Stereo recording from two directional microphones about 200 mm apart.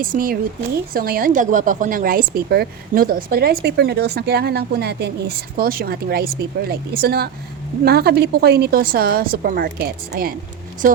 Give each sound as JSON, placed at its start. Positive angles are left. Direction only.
{"t": 0.0, "sound": "a woman's voice", "side_deg": -45}